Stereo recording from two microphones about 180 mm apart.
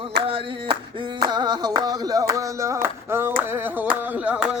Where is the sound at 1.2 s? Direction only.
25° right (ahead or behind).